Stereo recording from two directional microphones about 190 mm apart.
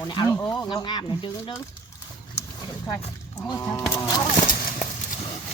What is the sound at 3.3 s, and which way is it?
Speech, 20° left (ahead or behind).